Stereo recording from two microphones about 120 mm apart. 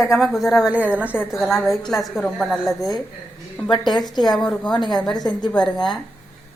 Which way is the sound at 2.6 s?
30° left (ahead or behind).